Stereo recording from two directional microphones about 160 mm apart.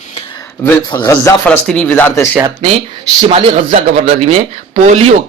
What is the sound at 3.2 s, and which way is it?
Speech, 40° right (ahead or behind).